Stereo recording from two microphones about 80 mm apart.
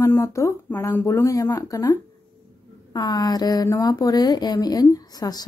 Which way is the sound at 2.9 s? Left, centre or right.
Left.